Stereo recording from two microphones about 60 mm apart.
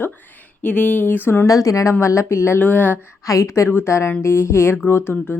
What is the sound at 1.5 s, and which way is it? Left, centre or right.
Speech, left.